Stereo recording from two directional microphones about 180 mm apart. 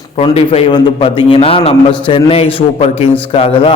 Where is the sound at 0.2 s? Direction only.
30° left (ahead or behind).